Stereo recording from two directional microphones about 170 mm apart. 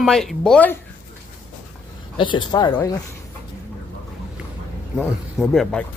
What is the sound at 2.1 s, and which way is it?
Speech, 30° left (ahead or behind).